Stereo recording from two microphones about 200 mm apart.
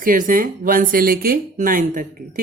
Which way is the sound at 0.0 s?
45° right (ahead or behind).